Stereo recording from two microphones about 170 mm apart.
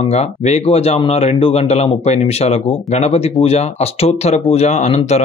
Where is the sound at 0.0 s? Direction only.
40° left (ahead or behind).